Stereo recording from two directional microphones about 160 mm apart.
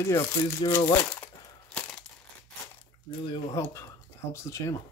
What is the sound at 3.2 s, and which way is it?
Speech, 30° left (ahead or behind).